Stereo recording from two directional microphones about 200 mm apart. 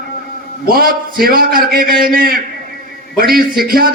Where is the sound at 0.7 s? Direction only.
50° right (ahead or behind).